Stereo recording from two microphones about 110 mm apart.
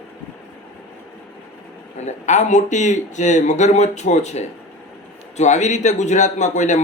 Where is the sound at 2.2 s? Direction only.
90° left.